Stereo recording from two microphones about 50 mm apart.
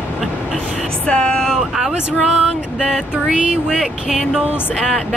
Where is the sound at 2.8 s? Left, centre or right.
Centre.